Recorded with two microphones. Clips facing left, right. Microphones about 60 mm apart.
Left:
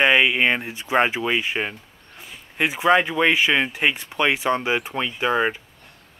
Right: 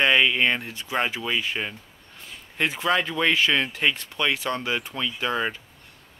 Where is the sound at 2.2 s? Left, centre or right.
Centre.